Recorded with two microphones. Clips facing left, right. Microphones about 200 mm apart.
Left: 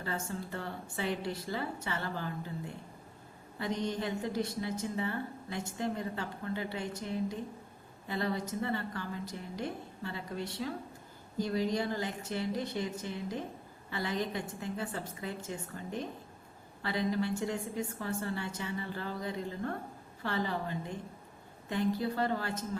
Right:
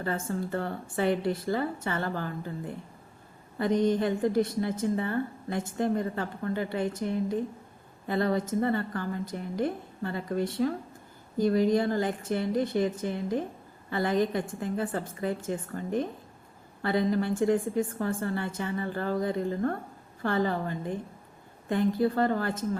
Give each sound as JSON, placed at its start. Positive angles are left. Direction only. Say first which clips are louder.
{"t": 0.0, "sound": "a woman's voice", "louder": "right 7 dB", "side_deg": -50}